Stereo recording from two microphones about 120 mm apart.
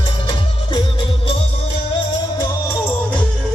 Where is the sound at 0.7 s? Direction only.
50° left (ahead or behind).